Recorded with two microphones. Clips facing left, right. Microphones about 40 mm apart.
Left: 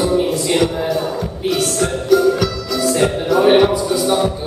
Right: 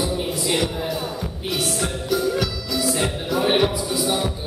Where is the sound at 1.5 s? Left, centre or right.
Centre.